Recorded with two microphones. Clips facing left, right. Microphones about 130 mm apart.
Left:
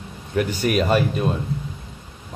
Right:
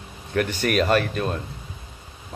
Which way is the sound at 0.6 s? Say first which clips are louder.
Left 1 dB; 10° left (ahead or behind).